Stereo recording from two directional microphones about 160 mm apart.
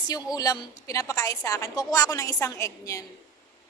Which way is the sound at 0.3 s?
20° left (ahead or behind).